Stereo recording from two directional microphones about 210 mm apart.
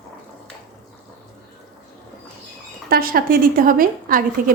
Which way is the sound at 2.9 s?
45° right (ahead or behind).